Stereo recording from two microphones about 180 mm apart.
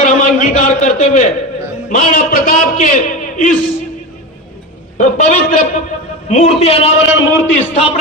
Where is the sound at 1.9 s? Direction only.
50° left (ahead or behind).